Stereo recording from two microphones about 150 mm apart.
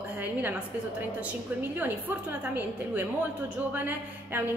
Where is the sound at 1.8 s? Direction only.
10° right (ahead or behind).